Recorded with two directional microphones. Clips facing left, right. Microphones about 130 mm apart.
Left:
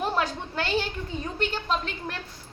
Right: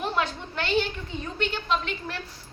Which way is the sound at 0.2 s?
40° left (ahead or behind).